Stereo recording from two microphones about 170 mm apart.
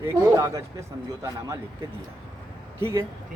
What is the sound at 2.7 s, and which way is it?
Speech, 15° right (ahead or behind).